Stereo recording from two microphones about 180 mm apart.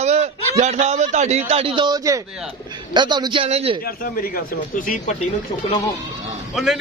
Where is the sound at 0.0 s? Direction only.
40° right (ahead or behind).